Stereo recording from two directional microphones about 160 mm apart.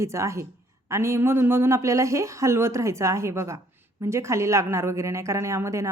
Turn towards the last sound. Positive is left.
turn(degrees=-20)  # may be behind; listen again after turning